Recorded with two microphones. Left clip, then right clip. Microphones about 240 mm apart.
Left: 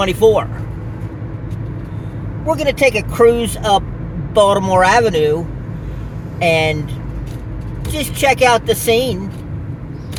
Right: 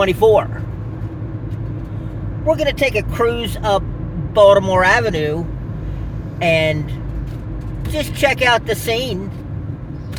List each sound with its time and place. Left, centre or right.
0.0 s speech: centre
2.5 s speech: centre
6.4 s speech: centre
7.9 s speech: left